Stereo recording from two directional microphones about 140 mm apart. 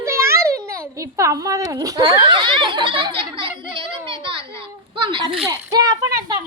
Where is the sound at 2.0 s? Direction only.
35° right (ahead or behind).